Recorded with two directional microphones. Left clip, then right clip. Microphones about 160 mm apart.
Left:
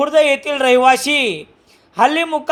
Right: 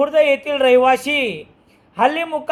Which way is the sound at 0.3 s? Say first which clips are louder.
Even; 30° left (ahead or behind).